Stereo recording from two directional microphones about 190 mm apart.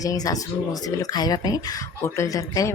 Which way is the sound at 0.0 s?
20° left (ahead or behind).